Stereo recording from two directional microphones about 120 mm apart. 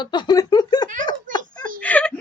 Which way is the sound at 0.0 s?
40° left (ahead or behind).